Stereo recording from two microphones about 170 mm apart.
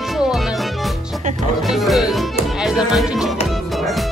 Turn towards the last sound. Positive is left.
turn(degrees=0)  # may be behind; listen again after turning